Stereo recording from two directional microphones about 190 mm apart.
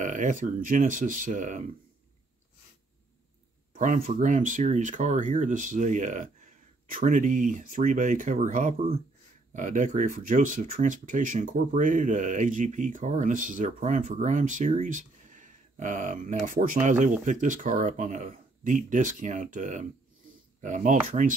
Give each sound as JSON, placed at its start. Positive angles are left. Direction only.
{"t": 0.0, "sound": "speech", "side_deg": -40}
{"t": 3.7, "sound": "speech", "side_deg": -40}